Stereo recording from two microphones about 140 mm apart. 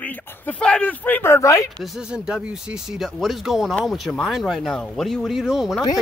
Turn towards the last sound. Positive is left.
turn(degrees=-5)  # may be behind; listen again after turning